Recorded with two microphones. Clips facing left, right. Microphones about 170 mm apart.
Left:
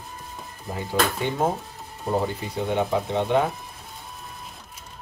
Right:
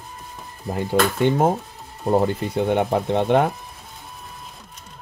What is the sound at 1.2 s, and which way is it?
Speech, 60° right (ahead or behind).